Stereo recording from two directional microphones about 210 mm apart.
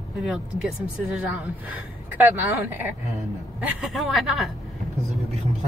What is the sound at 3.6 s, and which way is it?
Speech, centre (ahead or behind).